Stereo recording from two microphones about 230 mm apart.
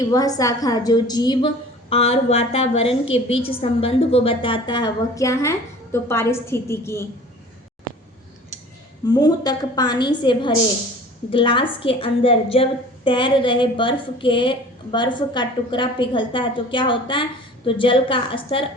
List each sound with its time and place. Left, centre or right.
0.1 s a woman's voice: centre
9.0 s a woman's voice: centre